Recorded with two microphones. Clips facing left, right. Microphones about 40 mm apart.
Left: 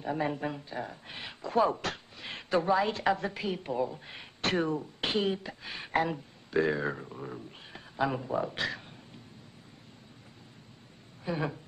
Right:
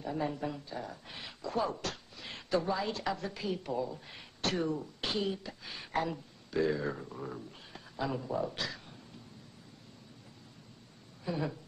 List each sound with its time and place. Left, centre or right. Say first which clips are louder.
0.0 s speech: left 3 dB; left
7.2 s speech: left 1 dB; centre
7.5 s a sound: left 5 dB; left
8.5 s speech: left 5 dB; left
11.2 s speech: left 3 dB; left